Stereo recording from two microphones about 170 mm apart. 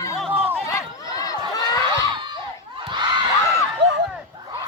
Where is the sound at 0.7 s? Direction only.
20° left (ahead or behind).